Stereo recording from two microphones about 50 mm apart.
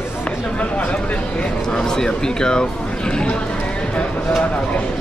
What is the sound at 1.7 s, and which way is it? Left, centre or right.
Speech, centre.